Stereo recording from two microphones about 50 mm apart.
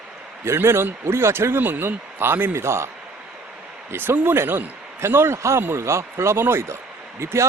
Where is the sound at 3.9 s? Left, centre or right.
Right.